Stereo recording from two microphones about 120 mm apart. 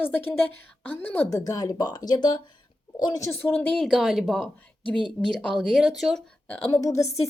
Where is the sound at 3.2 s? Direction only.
20° left (ahead or behind); by 6.2 s centre (ahead or behind).